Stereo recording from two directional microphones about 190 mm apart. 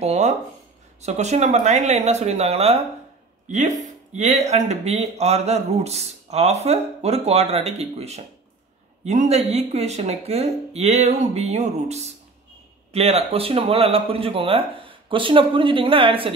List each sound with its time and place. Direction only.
0.0 s speech: 35° right (ahead or behind)